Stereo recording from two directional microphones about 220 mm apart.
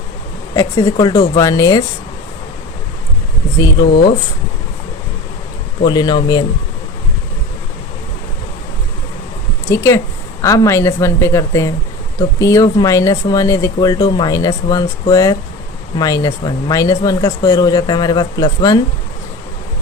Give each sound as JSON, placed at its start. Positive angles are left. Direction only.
{"t": 0.5, "sound": "speech", "side_deg": 15}
{"t": 5.8, "sound": "speech", "side_deg": 20}
{"t": 9.6, "sound": "speech", "side_deg": 10}